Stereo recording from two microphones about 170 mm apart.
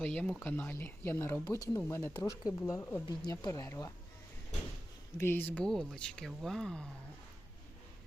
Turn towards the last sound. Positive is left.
turn(degrees=5)  # may be behind; listen again after turning